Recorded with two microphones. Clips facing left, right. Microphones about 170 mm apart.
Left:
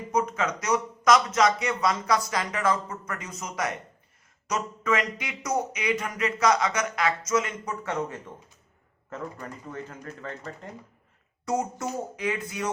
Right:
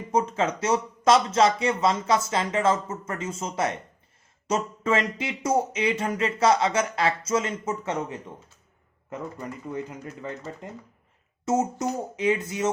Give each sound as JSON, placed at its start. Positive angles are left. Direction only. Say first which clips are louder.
{"t": 0.1, "sound": "speech", "louder": "right 2 dB", "side_deg": -30}